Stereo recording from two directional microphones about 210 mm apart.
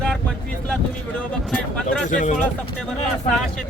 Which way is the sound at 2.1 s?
35° left (ahead or behind).